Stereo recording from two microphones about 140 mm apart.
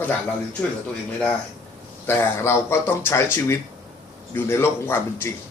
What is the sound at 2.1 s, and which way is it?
A man's voice, 20° left (ahead or behind).